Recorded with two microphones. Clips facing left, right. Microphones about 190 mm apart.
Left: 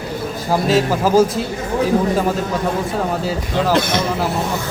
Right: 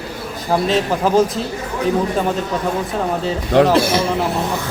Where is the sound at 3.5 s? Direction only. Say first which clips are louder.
Right 8 dB; 70° right (ahead or behind).